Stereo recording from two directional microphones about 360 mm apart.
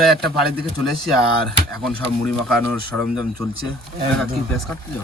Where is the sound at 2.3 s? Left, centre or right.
Centre.